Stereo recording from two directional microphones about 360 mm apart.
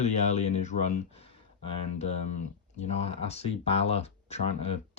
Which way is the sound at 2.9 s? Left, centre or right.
Centre.